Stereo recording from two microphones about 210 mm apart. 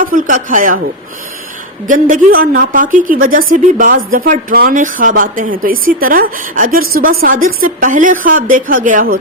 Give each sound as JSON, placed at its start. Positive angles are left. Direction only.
{"t": 0.0, "sound": "speech", "side_deg": -40}
{"t": 1.9, "sound": "speech", "side_deg": -40}